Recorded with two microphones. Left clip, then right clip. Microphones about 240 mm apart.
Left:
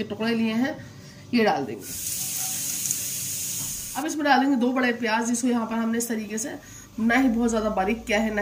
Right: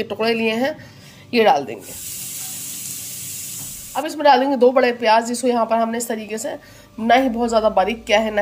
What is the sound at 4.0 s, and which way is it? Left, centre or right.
A woman's voice, right.